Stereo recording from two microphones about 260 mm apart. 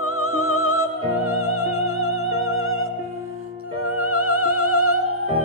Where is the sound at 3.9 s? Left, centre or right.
Left.